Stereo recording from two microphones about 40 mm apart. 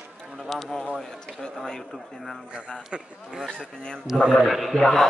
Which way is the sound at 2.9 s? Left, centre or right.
Right.